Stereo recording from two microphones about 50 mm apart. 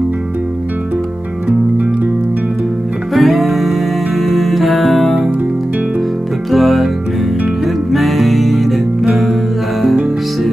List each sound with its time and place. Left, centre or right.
3.2 s music: centre
6.5 s music: centre